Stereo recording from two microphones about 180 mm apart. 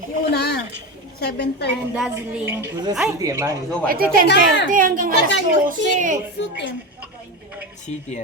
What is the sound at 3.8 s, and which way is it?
A woman's voice, 55° right (ahead or behind).